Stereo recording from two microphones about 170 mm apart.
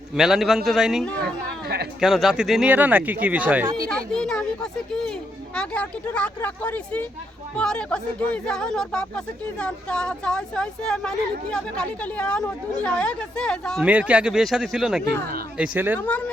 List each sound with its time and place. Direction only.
0.2 s speech: centre (ahead or behind)
1.6 s speech: 70° right (ahead or behind)
2.0 s speech: centre (ahead or behind)
3.8 s speech: 5° left (ahead or behind)
13.8 s speech: 10° right (ahead or behind)
16.0 s speech: 10° left (ahead or behind)